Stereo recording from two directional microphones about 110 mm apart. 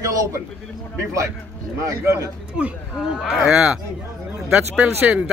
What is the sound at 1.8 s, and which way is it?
Speech, 30° right (ahead or behind).